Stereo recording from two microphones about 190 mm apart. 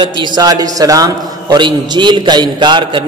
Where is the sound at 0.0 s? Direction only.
25° right (ahead or behind).